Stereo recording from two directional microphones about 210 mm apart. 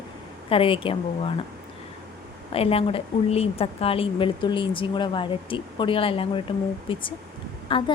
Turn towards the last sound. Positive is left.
turn(degrees=25)  # may be behind; listen again after turning